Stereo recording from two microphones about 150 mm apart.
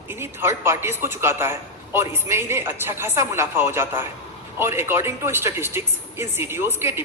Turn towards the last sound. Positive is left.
turn(degrees=-15)  # may be behind; listen again after turning